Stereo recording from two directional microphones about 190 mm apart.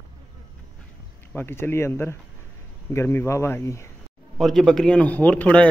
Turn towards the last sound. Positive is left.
turn(degrees=5)  # may be behind; listen again after turning